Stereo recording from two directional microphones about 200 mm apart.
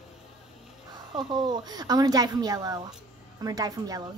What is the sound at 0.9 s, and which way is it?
A woman's voice, 20° right (ahead or behind).